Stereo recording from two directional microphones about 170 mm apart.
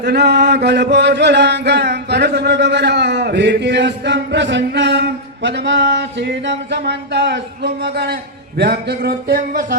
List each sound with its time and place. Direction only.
0.0 s chant: 75° right (ahead or behind)
8.5 s speech: 80° right; by 9.6 s 65° right (ahead or behind)